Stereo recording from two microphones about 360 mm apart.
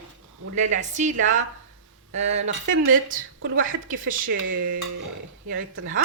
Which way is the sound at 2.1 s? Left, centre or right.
Centre.